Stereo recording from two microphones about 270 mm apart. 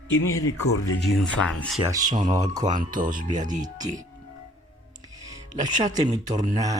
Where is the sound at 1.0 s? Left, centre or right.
Centre.